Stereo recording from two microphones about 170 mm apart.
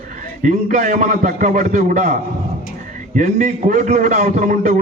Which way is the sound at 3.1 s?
50° right (ahead or behind).